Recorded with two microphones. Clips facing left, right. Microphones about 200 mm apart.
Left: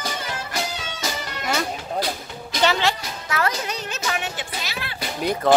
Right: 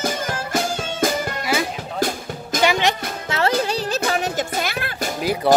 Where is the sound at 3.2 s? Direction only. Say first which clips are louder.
Right 5 dB; 25° right (ahead or behind); by 5.1 s 50° right (ahead or behind).